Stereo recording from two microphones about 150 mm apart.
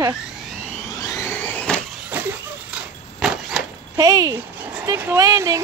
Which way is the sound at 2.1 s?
10° right (ahead or behind).